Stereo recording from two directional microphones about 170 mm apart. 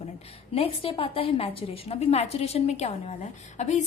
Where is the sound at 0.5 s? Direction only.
35° left (ahead or behind).